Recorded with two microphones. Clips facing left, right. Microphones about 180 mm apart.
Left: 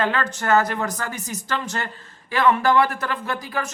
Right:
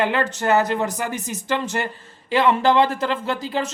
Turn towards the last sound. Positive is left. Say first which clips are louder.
# right 3 dB
turn(degrees=-25)  # may be behind; listen again after turning